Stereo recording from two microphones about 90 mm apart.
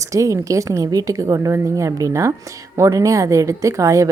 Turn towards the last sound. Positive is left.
turn(degrees=-35)  # may be behind; listen again after turning